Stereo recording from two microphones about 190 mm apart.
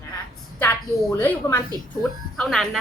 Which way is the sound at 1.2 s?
10° left (ahead or behind).